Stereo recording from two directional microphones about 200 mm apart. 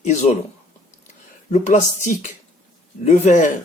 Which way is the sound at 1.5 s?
35° left (ahead or behind).